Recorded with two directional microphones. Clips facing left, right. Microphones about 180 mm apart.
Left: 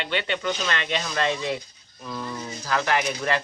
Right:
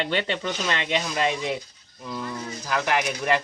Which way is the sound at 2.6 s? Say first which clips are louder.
Left 1 dB; 15° right (ahead or behind).